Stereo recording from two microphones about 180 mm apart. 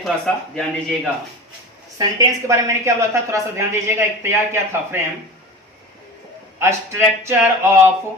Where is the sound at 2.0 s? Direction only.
20° right (ahead or behind).